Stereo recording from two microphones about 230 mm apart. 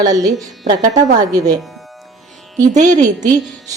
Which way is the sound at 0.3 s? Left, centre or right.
Centre.